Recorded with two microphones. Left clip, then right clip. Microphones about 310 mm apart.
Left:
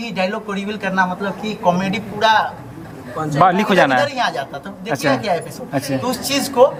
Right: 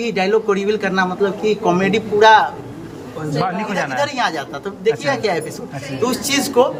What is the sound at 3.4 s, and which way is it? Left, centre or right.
Speech, left.